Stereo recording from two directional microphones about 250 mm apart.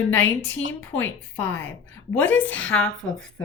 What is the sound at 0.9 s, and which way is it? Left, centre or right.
A woman's voice, centre.